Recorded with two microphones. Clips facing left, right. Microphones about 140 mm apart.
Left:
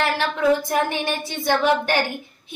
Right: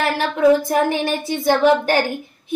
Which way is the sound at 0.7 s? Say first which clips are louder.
Right 4 dB; 35° right (ahead or behind).